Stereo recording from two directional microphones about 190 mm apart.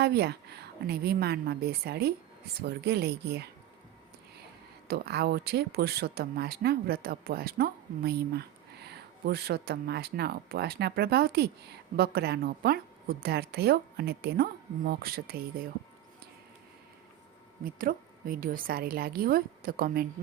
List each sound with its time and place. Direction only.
0.0 s speech: 60° right (ahead or behind)
4.9 s speech: 55° right (ahead or behind)
17.6 s speech: 50° right (ahead or behind)